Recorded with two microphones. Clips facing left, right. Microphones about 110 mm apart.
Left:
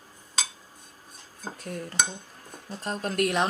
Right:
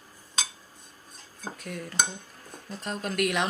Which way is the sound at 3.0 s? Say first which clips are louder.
Left 2 dB; 35° left (ahead or behind).